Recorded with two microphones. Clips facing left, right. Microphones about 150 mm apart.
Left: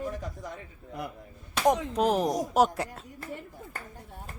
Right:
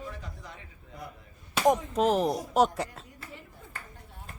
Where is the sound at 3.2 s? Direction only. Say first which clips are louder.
Left 7 dB; 45° left (ahead or behind).